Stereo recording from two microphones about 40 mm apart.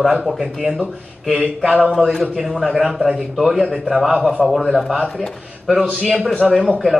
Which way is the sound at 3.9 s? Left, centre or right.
Centre.